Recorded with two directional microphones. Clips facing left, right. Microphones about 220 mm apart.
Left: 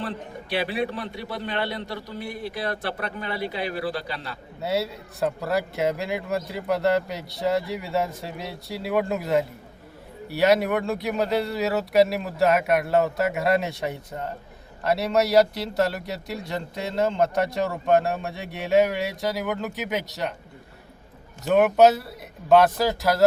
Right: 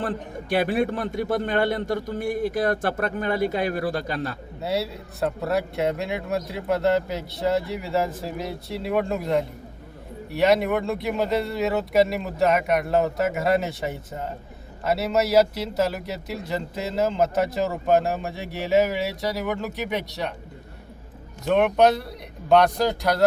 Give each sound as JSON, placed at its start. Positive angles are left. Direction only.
{"t": 0.0, "sound": "a man's voice", "side_deg": -45}
{"t": 4.6, "sound": "a man's voice", "side_deg": 0}
{"t": 21.4, "sound": "a man's voice", "side_deg": 5}